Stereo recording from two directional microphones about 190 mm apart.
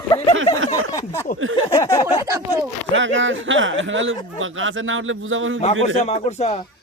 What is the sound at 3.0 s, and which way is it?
Speech, 80° right.